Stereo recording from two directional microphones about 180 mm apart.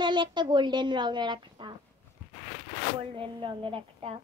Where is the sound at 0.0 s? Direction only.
25° right (ahead or behind).